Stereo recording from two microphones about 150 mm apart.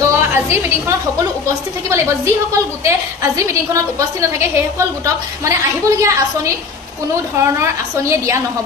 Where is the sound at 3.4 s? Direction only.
20° right (ahead or behind).